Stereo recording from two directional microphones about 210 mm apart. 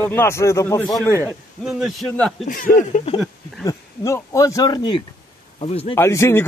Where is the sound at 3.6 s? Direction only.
15° left (ahead or behind).